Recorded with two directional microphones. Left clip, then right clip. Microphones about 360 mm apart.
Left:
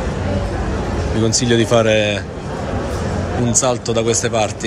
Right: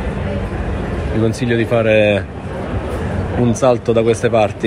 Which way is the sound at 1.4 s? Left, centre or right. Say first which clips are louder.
Left 1 dB; left.